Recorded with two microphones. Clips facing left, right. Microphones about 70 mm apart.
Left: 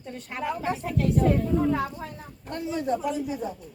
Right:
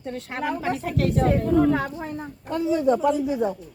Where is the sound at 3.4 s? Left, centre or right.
Right.